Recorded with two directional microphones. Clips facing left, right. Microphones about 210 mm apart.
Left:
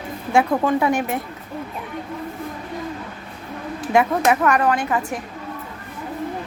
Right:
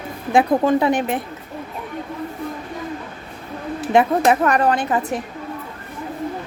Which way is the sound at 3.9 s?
30° right (ahead or behind).